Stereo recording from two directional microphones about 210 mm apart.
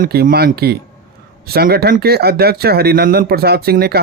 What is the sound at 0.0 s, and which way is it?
Speech, 45° right (ahead or behind).